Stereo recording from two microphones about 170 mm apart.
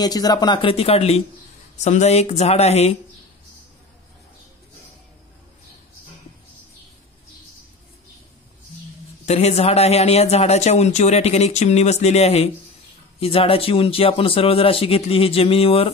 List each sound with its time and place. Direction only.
0.0 s a man's voice: 20° left (ahead or behind); by 3.0 s 40° left (ahead or behind)
9.2 s a man's voice: 40° left (ahead or behind)